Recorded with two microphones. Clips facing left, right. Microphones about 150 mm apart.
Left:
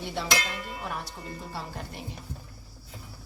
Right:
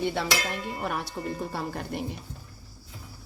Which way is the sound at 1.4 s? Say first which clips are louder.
Right 5 dB; 60° right (ahead or behind).